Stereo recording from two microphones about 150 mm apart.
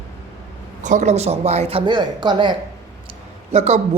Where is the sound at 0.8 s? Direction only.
55° right (ahead or behind); by 2.6 s 30° right (ahead or behind).